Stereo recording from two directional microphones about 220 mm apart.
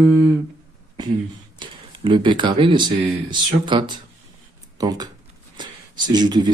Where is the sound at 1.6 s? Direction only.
20° right (ahead or behind).